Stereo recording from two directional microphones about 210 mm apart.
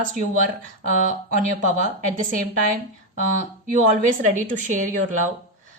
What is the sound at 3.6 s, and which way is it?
A woman's voice, 40° right (ahead or behind).